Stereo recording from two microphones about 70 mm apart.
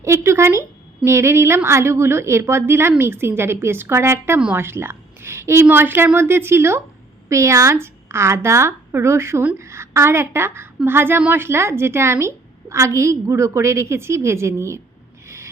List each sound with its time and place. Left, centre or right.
0.0 s a woman's voice: right